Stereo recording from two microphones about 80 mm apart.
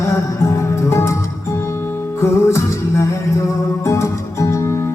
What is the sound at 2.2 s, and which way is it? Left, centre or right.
Music, left.